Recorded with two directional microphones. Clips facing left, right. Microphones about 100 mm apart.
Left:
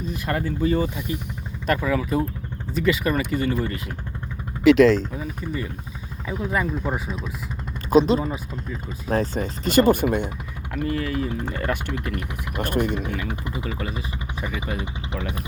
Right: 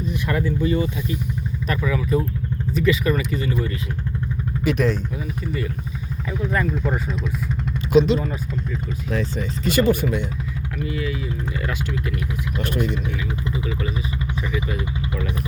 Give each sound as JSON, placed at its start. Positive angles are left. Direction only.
{"t": 0.1, "sound": "speech", "side_deg": 50}
{"t": 1.7, "sound": "speech", "side_deg": 50}
{"t": 4.6, "sound": "speech", "side_deg": 90}
{"t": 5.1, "sound": "speech", "side_deg": 35}
{"t": 6.4, "sound": "speech", "side_deg": 10}
{"t": 7.9, "sound": "speech", "side_deg": 40}
{"t": 13.7, "sound": "speech", "side_deg": 40}
{"t": 14.5, "sound": "speech", "side_deg": 25}